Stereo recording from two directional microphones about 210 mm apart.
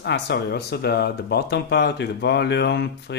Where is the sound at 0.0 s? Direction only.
55° left (ahead or behind).